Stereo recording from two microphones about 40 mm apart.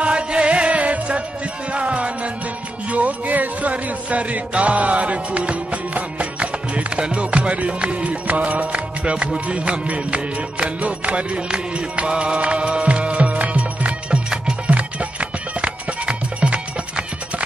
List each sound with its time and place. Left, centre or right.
0.0 s music: right